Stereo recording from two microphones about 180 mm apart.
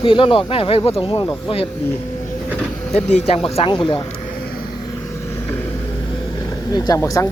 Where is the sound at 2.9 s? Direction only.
40° left (ahead or behind).